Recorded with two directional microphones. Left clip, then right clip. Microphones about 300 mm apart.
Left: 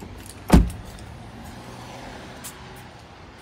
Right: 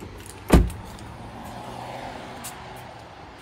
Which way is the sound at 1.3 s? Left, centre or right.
Right.